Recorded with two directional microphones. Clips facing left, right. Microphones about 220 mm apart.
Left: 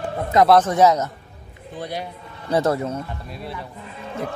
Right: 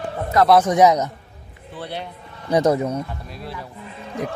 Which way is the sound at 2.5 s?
15° right (ahead or behind).